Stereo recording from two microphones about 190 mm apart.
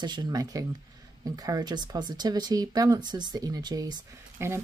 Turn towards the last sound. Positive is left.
turn(degrees=-15)  # may be behind; listen again after turning